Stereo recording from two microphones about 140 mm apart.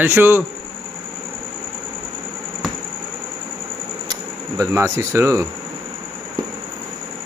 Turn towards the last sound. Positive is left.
turn(degrees=-20)  # may be behind; listen again after turning